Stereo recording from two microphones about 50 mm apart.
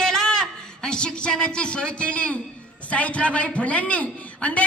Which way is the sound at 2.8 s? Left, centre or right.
Left.